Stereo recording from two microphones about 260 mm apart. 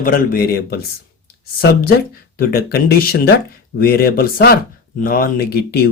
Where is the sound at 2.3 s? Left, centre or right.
Left.